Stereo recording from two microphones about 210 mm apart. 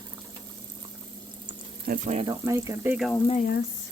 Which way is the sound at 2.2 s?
15° right (ahead or behind).